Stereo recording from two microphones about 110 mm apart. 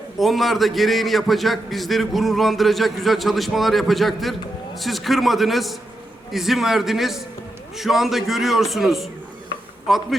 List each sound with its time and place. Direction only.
0.2 s a man's voice: centre (ahead or behind)